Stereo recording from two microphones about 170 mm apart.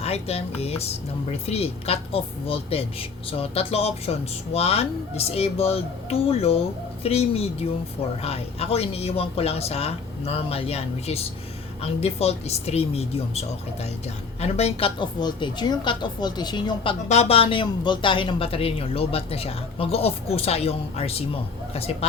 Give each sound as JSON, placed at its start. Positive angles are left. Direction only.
{"t": 0.0, "sound": "speech", "side_deg": 35}
{"t": 14.4, "sound": "a woman's voice", "side_deg": 40}